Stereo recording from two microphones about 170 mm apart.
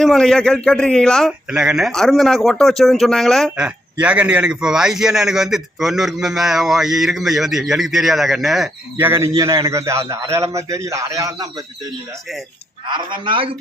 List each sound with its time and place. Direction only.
0.0 s a man's voice: 5° left (ahead or behind)
9.0 s a man's voice: 15° right (ahead or behind)
12.9 s a man's voice: 30° right (ahead or behind)